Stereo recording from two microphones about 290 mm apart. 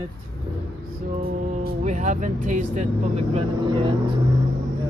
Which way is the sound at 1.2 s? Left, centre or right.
Right.